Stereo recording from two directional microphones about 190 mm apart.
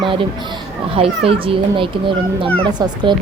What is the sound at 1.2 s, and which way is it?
Speech, 30° right (ahead or behind).